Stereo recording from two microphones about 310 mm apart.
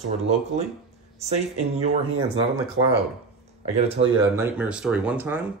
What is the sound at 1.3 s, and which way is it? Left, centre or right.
Speech, right.